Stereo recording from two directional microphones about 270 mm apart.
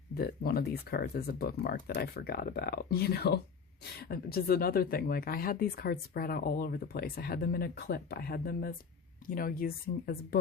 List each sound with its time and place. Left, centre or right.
0.1 s speech: left